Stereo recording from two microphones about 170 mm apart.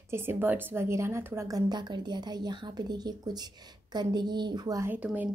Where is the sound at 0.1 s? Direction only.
15° right (ahead or behind).